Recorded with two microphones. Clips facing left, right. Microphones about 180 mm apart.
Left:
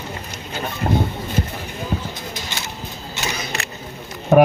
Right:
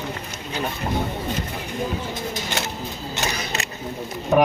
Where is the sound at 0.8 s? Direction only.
50° left (ahead or behind).